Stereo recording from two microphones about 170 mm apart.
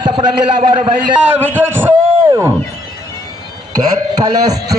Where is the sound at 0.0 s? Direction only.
30° right (ahead or behind).